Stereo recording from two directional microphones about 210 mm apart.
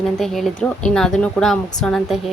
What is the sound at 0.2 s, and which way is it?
Speech, centre (ahead or behind).